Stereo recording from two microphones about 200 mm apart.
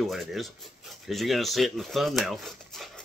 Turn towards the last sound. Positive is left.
turn(degrees=0)  # may be behind; listen again after turning